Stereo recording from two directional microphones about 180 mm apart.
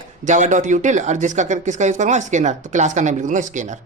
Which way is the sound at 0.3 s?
45° right (ahead or behind).